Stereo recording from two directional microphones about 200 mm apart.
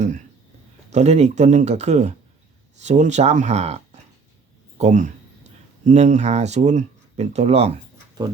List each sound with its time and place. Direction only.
0.9 s speech: 35° right (ahead or behind)